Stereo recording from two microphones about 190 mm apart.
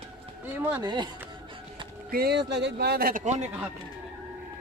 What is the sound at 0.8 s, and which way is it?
Speech, 25° right (ahead or behind).